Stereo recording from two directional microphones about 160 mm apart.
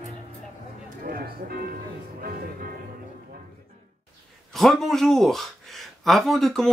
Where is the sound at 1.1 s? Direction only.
70° right (ahead or behind).